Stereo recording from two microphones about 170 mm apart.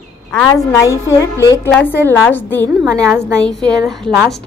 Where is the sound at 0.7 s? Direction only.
15° left (ahead or behind).